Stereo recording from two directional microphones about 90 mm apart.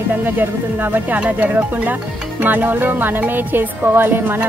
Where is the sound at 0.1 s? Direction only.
20° right (ahead or behind).